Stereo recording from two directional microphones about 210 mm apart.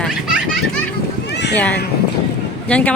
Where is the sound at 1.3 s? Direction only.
55° left (ahead or behind).